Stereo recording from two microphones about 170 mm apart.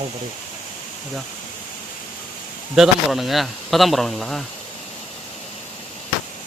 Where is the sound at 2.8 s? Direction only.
Centre (ahead or behind).